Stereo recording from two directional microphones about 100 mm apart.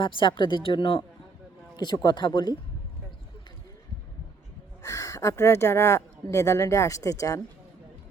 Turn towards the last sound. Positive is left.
turn(degrees=35)  # may be behind; listen again after turning